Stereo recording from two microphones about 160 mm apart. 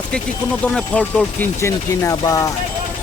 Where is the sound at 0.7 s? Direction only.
5° left (ahead or behind).